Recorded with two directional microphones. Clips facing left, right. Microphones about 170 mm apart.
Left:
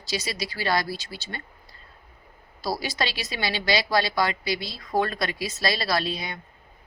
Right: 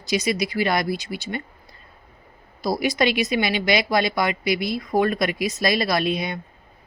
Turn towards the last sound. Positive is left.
turn(degrees=-20)  # may be behind; listen again after turning